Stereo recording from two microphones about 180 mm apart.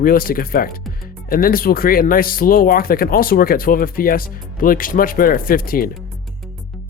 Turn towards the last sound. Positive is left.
turn(degrees=50)  # may be behind; listen again after turning